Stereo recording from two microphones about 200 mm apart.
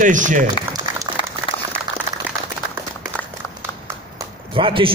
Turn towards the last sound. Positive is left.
turn(degrees=-25)  # may be behind; listen again after turning